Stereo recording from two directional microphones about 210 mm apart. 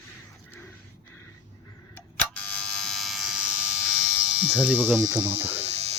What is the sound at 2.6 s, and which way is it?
Electric shaver, 5° left (ahead or behind).